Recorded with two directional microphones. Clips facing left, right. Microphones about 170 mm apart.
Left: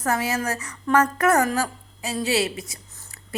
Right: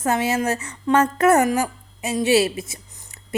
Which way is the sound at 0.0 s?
25° right (ahead or behind).